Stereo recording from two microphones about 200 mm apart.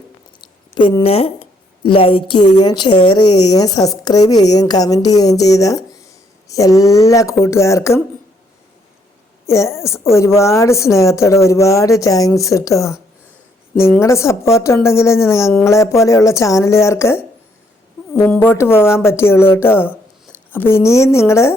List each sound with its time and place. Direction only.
0.4 s a sound: 25° left (ahead or behind)
2.6 s a woman's voice: 20° left (ahead or behind)
9.5 s a woman's voice: 15° left (ahead or behind)